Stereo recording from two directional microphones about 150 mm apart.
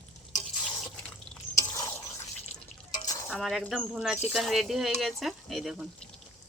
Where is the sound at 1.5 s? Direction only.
20° left (ahead or behind).